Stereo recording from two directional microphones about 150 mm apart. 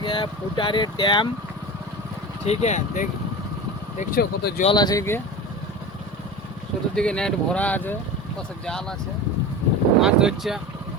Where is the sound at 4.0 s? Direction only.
80° left.